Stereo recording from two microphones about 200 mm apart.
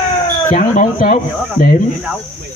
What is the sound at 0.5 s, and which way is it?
Speech, 40° left (ahead or behind).